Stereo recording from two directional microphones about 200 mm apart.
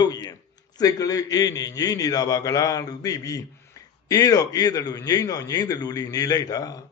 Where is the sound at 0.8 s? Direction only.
20° left (ahead or behind).